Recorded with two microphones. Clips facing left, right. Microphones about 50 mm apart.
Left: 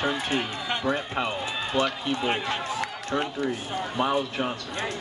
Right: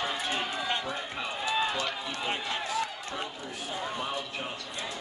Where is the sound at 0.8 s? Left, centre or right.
Left.